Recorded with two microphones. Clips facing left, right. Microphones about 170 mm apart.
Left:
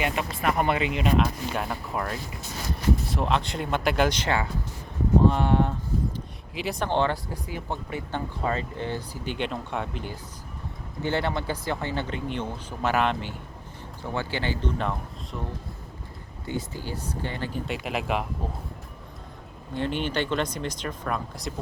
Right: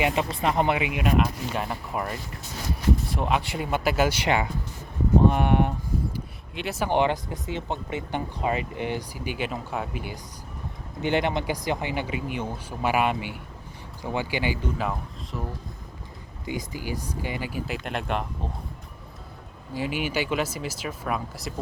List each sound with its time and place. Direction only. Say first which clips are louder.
0.0 s speech: right 2 dB; 25° right (ahead or behind)
6.5 s speech: right 1 dB; centre (ahead or behind)
16.5 s speech: right 1 dB; 10° right (ahead or behind)
17.8 s speech: left 2 dB; 5° left (ahead or behind)
19.7 s speech: even; 5° right (ahead or behind)